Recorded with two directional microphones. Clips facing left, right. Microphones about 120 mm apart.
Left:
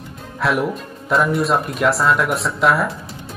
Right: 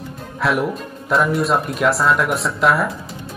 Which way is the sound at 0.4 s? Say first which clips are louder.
Even; centre (ahead or behind).